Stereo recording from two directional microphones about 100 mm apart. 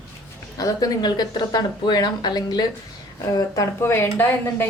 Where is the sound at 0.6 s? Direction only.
35° left (ahead or behind).